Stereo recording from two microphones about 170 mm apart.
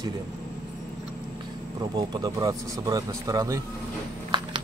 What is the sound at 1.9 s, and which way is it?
Speech, 25° right (ahead or behind).